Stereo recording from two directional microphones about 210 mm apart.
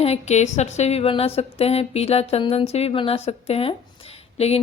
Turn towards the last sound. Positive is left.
turn(degrees=30)  # may be behind; listen again after turning